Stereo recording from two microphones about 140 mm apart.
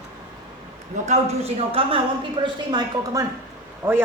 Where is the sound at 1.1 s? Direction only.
45° right (ahead or behind).